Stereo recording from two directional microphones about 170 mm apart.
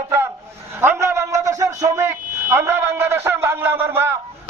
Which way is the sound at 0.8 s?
15° right (ahead or behind).